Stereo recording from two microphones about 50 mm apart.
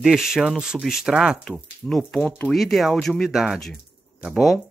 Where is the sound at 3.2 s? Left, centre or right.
Centre.